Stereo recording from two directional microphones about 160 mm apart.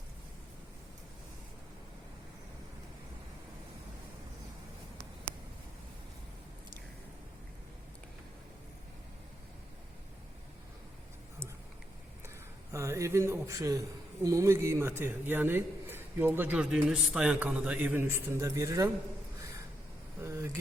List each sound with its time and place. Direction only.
12.7 s a man's voice: 20° right (ahead or behind)
20.2 s vehicle: 15° right (ahead or behind)